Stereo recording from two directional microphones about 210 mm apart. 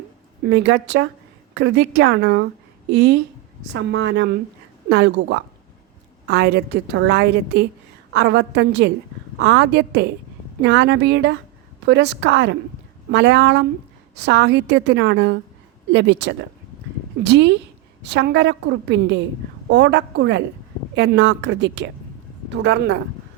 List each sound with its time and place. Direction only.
0.4 s a woman's voice: 55° right (ahead or behind)